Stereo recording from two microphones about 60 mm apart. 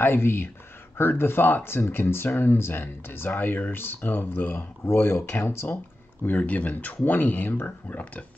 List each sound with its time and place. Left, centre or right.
0.0 s speech: left
6.2 s speech: left